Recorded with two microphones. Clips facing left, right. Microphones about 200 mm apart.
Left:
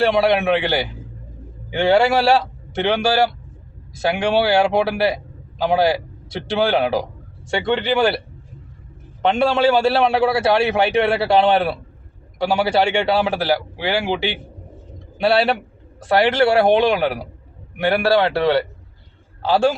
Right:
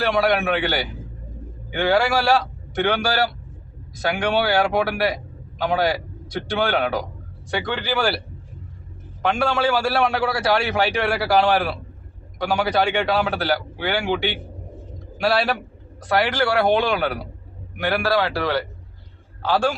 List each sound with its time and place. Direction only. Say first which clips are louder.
0.0 s a man's voice: left 4 dB; 25° left (ahead or behind)
9.2 s a man's voice: left 5 dB; 25° left (ahead or behind)